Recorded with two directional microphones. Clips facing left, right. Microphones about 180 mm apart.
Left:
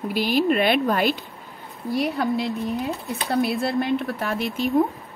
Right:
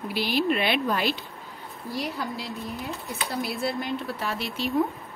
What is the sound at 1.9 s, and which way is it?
Speech, 60° left (ahead or behind).